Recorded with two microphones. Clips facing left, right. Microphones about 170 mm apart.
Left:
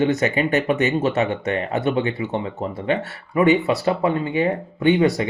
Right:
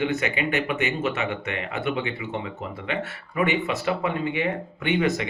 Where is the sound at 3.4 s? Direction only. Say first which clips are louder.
Left 7 dB; 35° left (ahead or behind).